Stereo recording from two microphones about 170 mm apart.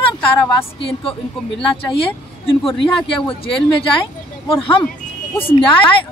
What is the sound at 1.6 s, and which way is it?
Speech, 30° left (ahead or behind).